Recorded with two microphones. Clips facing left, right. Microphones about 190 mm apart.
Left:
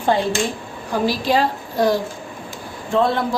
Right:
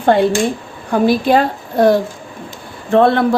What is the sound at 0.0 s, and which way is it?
Speech, 60° right (ahead or behind).